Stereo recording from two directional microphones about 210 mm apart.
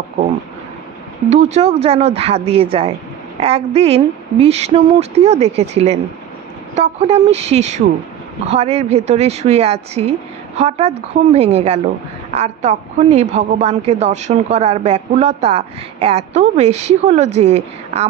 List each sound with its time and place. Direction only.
1.3 s a woman's voice: 30° right (ahead or behind)